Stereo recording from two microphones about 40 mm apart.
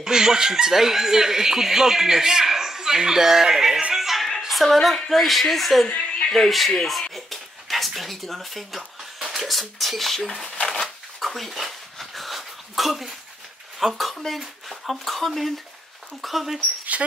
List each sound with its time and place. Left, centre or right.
0.0 s speech: centre
3.9 s music: centre
4.5 s a woman's voice: centre
5.9 s a sound: left
6.3 s a woman's voice: centre
6.8 s a sound: centre
9.3 s shuffling cards: centre
13.7 s a woman's voice: centre
16.9 s speech: right